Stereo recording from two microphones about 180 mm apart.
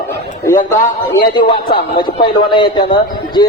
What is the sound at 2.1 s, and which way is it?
Speech, 30° left (ahead or behind).